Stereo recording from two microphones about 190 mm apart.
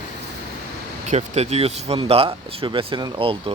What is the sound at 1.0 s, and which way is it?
Speech, 35° right (ahead or behind).